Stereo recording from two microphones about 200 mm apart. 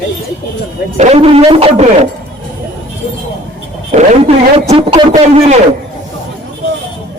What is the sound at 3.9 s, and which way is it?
A man's voice, 30° right (ahead or behind).